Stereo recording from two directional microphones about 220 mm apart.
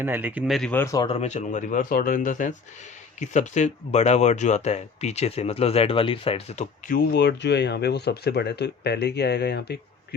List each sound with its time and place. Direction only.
0.0 s speech: 10° right (ahead or behind); by 6.7 s 25° left (ahead or behind)
6.8 s speech: 40° left (ahead or behind)